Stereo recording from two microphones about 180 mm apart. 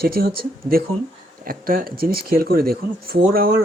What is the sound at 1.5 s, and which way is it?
Speech, 55° right (ahead or behind).